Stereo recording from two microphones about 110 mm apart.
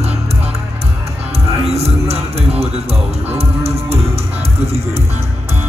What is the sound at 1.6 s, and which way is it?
Music, 70° right (ahead or behind).